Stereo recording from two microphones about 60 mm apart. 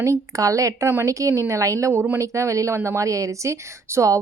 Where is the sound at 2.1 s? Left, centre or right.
Right.